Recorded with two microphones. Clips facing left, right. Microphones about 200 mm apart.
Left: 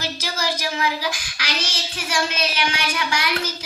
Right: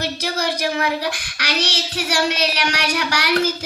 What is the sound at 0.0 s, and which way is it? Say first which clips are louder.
Speech: right 4 dB; 60° right (ahead or behind).